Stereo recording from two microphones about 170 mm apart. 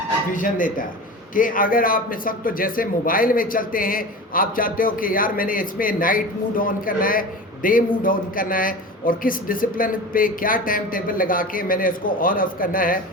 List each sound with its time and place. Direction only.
0.3 s a man's voice: 50° left (ahead or behind)